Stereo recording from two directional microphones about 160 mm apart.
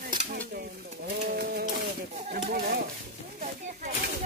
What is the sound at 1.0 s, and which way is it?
Speech, 70° right (ahead or behind).